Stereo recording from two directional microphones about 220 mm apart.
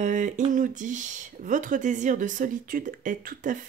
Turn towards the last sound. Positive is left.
turn(degrees=-40)  # may be behind; listen again after turning